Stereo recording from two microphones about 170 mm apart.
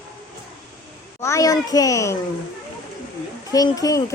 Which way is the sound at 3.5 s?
20° left (ahead or behind).